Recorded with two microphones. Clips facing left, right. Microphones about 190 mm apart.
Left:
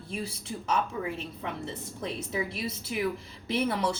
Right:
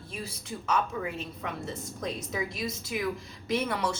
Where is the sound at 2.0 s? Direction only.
30° left (ahead or behind).